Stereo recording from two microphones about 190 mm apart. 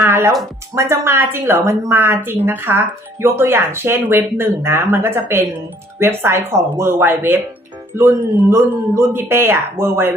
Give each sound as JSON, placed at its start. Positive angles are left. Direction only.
{"t": 0.0, "sound": "music", "side_deg": -15}
{"t": 0.8, "sound": "a woman's voice", "side_deg": -15}